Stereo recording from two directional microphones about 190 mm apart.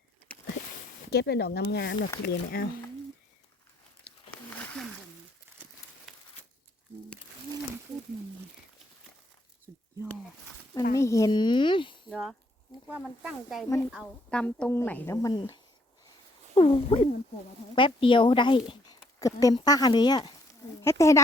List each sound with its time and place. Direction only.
1.1 s speech: 60° left (ahead or behind)
2.2 s speech: 50° left (ahead or behind)
9.7 s a sound: 5° right (ahead or behind)
10.9 s speech: 15° left (ahead or behind)
12.1 s a woman's voice: centre (ahead or behind); by 15.5 s 20° left (ahead or behind)
16.6 s a woman's voice: 30° left (ahead or behind); by 21.2 s 15° left (ahead or behind)